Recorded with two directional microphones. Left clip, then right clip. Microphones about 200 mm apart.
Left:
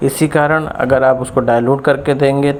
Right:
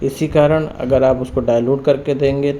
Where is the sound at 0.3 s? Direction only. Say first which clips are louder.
Right 2 dB; 10° left (ahead or behind).